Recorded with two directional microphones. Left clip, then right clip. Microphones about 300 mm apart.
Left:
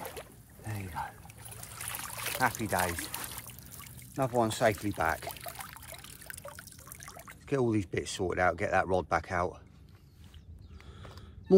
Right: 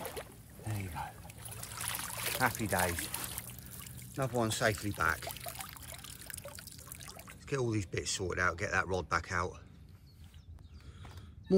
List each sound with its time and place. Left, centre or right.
0.0 s boat: centre
0.7 s boat: centre
1.2 s boat: centre
2.6 s speech: centre
2.9 s speech: centre
3.3 s pour: centre
4.2 s speech: centre
5.4 s trickle: centre